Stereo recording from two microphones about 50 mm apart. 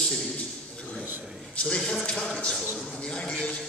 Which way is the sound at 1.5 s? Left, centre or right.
Centre.